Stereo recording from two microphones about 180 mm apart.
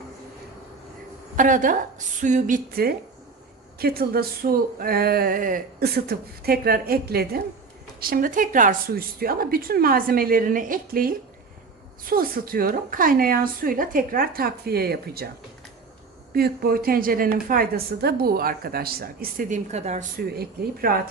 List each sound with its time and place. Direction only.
1.4 s music: 45° right (ahead or behind)
3.8 s a woman's voice: 60° right (ahead or behind)
16.3 s a woman's voice: 55° right (ahead or behind); by 20.1 s 40° right (ahead or behind)
20.1 s a woman's voice: 60° right (ahead or behind)